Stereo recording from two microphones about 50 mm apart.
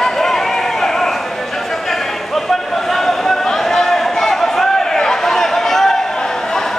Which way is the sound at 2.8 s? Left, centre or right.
Centre.